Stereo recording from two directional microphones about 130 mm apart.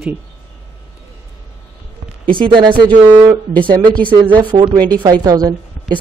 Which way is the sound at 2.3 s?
40° right (ahead or behind).